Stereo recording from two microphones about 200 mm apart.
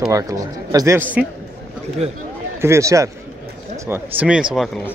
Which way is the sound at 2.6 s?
15° right (ahead or behind).